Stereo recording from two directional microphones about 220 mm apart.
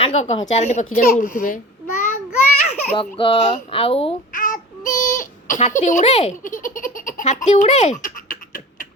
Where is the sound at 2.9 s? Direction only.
25° left (ahead or behind).